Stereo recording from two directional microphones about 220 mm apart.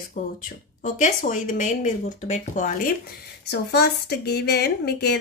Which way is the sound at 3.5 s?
50° left (ahead or behind).